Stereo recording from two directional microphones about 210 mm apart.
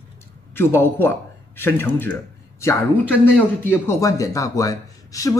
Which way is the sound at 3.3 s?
10° left (ahead or behind).